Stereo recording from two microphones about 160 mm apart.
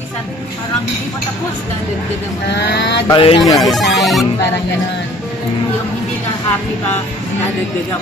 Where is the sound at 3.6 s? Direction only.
Centre (ahead or behind).